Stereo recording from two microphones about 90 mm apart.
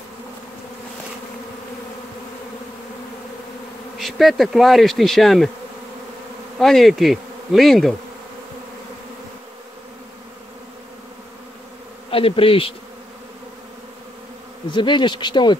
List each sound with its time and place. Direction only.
4.0 s bee: centre (ahead or behind)
6.6 s bee: centre (ahead or behind)
12.1 s bee: 90° left
14.7 s speech: 60° left (ahead or behind)